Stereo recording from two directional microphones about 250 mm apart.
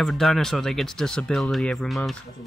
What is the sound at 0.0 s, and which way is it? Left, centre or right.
Speech, centre.